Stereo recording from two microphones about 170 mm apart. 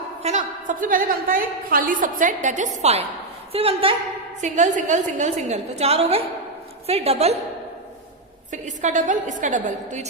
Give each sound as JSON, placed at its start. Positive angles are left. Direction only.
{"t": 0.2, "sound": "a woman's voice", "side_deg": -40}
{"t": 4.4, "sound": "a woman's voice", "side_deg": -45}
{"t": 8.6, "sound": "a woman's voice", "side_deg": -45}